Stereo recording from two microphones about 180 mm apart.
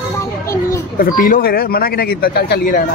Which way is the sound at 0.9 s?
50° left (ahead or behind).